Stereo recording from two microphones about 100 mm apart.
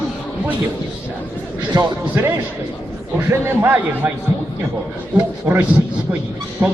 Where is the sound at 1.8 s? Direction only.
25° right (ahead or behind).